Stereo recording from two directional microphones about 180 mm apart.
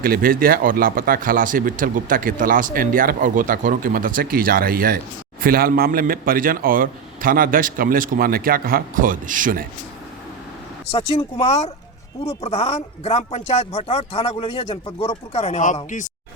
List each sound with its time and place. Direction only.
0.0 s speech: 55° right (ahead or behind)
10.9 s speech: 35° left (ahead or behind)